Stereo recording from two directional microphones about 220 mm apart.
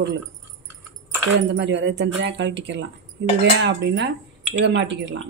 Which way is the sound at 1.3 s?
55° right (ahead or behind).